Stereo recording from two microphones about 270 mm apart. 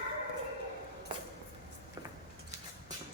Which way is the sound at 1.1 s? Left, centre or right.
Centre.